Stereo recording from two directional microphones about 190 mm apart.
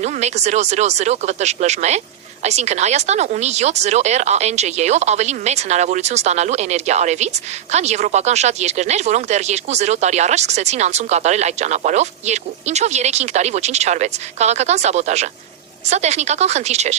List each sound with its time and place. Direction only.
0.0 s speech: 35° right (ahead or behind)